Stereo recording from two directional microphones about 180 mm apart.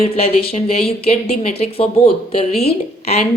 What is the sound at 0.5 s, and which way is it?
A woman's voice, 35° left (ahead or behind).